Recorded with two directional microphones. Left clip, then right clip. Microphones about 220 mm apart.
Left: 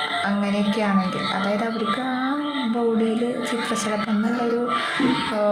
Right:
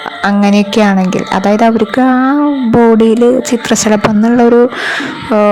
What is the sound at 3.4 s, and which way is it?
Speech, 40° right (ahead or behind).